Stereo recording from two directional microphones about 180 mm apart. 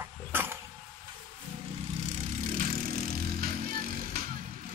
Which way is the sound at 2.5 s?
45° right (ahead or behind).